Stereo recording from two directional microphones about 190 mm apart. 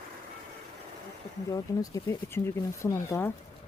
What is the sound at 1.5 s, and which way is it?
Speech, 15° left (ahead or behind).